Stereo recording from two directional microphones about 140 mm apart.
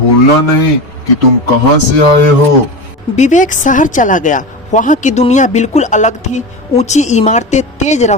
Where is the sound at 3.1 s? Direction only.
60° left (ahead or behind).